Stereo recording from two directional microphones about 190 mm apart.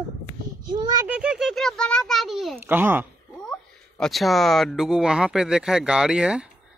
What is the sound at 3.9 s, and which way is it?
Speech, centre (ahead or behind).